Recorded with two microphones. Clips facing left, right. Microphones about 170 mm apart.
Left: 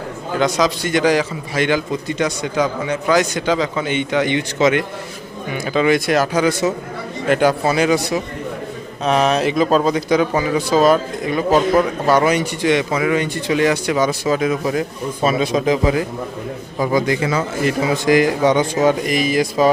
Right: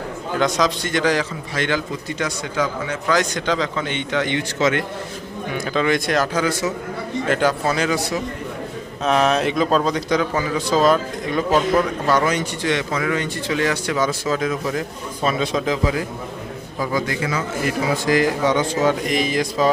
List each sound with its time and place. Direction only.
0.3 s a man's voice: centre (ahead or behind)
9.0 s a man's voice: centre (ahead or behind)